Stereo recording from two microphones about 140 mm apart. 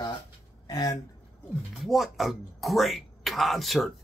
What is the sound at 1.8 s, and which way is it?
Speech, centre (ahead or behind).